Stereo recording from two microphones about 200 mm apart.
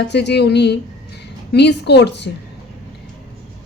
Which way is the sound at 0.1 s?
55° left (ahead or behind).